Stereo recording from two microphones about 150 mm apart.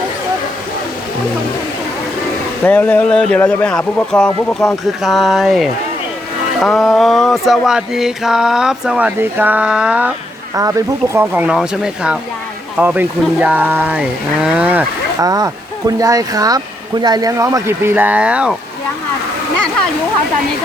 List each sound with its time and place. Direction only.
2.6 s speech: 10° left (ahead or behind)
4.4 s mantra: centre (ahead or behind)
10.5 s speech: 20° right (ahead or behind)
15.2 s speech: 25° right (ahead or behind); by 18.5 s 5° right (ahead or behind)